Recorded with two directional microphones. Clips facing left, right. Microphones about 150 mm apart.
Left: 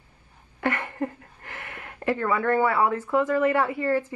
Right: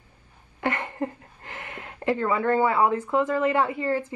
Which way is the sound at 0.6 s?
20° right (ahead or behind).